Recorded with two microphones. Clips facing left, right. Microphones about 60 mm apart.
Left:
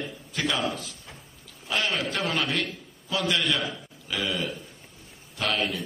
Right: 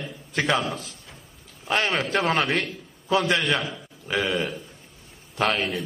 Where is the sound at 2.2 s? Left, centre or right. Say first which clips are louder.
Right 6 dB; right.